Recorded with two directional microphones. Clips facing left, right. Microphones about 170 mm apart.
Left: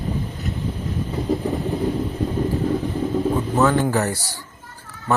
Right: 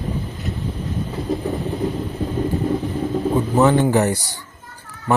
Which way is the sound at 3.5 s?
20° right (ahead or behind).